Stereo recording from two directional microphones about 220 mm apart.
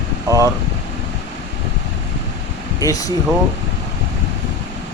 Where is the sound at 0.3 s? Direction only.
15° right (ahead or behind).